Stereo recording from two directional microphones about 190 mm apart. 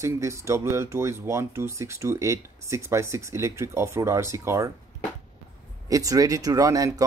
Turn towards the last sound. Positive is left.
turn(degrees=-20)  # may be behind; listen again after turning